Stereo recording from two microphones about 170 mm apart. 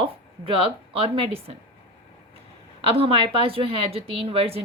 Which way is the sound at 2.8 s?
35° right (ahead or behind).